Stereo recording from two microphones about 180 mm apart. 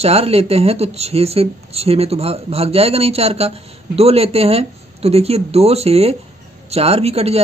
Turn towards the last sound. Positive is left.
turn(degrees=-35)  # may be behind; listen again after turning